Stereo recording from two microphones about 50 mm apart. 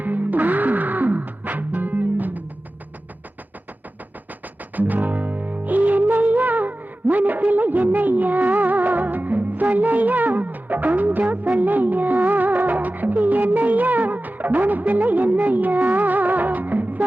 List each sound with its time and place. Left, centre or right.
0.0 s music: right
4.8 s music: right